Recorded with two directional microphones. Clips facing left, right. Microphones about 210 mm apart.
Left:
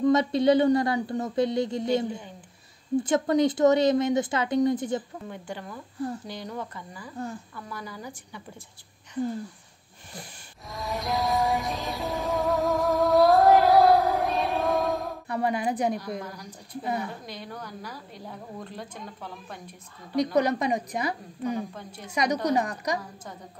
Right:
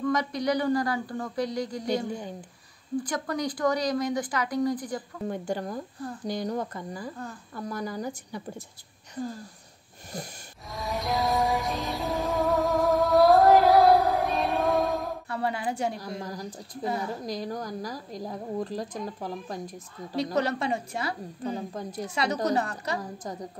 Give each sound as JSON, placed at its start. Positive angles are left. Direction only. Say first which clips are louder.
{"t": 0.0, "sound": "speech", "louder": "left 6 dB", "side_deg": 25}
{"t": 5.3, "sound": "a woman's voice", "louder": "right 7 dB", "side_deg": -40}
{"t": 10.7, "sound": "music", "louder": "even", "side_deg": 0}
{"t": 15.2, "sound": "a woman's voice", "louder": "left 7 dB", "side_deg": 20}
{"t": 16.0, "sound": "a woman's voice", "louder": "even", "side_deg": -40}
{"t": 20.3, "sound": "a woman's voice", "louder": "left 3 dB", "side_deg": 15}
{"t": 21.5, "sound": "a woman's voice", "louder": "left 2 dB", "side_deg": -35}
{"t": 22.1, "sound": "a woman's voice", "louder": "left 2 dB", "side_deg": 15}